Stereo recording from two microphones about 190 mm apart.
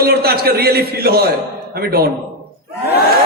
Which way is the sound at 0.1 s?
55° right (ahead or behind).